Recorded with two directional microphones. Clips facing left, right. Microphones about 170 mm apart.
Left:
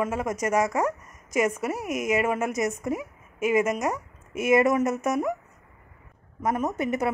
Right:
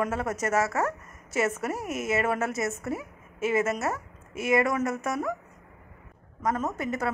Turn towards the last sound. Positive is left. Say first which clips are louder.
# left 4 dB
turn(degrees=20)  # may be behind; listen again after turning